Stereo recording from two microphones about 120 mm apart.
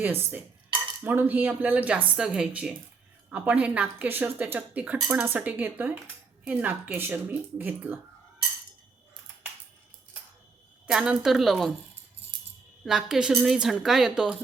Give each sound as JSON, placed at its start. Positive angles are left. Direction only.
{"t": 0.0, "sound": "speech", "side_deg": -20}
{"t": 10.8, "sound": "a woman's voice", "side_deg": -5}
{"t": 12.8, "sound": "a woman's voice", "side_deg": -5}